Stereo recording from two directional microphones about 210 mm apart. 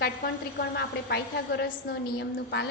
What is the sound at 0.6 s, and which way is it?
A woman's voice, 55° left (ahead or behind).